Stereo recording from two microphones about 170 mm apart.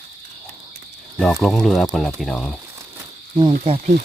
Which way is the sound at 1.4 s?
Centre (ahead or behind).